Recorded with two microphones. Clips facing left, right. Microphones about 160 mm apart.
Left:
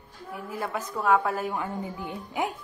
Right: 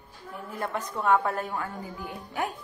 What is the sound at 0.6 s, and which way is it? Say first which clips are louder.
Speech: even; 5° left (ahead or behind).